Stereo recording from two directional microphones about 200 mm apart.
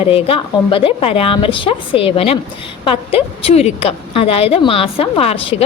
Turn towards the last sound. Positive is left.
turn(degrees=30)  # may be behind; listen again after turning